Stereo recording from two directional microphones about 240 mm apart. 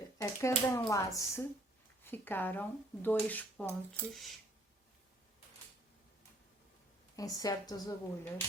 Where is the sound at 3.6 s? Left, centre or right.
Centre.